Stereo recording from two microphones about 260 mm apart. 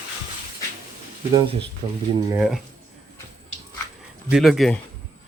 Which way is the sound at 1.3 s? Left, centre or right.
Right.